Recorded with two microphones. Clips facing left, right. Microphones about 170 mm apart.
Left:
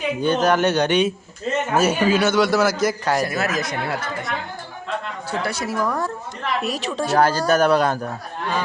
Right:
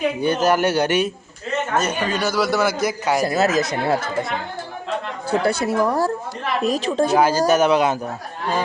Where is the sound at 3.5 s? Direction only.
40° right (ahead or behind).